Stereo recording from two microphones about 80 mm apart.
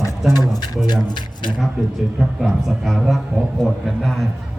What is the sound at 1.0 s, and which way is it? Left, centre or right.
Speech, left.